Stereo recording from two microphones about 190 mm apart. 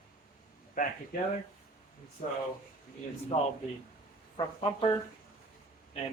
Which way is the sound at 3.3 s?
30° left (ahead or behind).